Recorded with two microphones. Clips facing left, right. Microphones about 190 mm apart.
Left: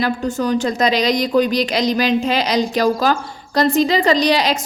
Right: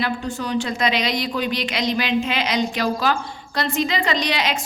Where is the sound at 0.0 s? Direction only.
45° left (ahead or behind).